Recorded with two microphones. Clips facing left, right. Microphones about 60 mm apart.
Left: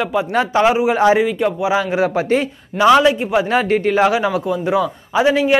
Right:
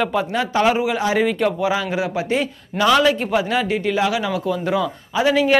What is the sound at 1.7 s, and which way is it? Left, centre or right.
Speech, left.